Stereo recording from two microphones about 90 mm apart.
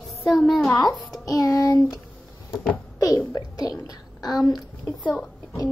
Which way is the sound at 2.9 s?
40° left (ahead or behind).